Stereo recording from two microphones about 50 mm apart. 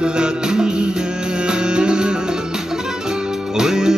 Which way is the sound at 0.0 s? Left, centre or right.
Centre.